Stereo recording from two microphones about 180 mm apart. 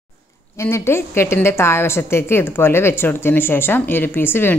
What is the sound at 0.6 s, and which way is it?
A woman's voice, 15° left (ahead or behind).